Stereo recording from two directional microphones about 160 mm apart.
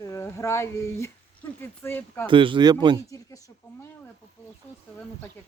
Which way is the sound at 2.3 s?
30° right (ahead or behind).